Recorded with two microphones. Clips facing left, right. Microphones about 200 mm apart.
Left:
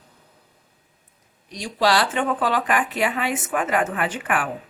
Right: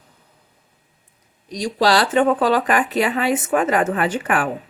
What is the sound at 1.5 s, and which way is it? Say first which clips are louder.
A woman's voice: right 3 dB; 35° right (ahead or behind).